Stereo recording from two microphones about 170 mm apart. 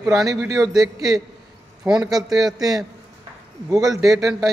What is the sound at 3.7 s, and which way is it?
Speech, 20° right (ahead or behind).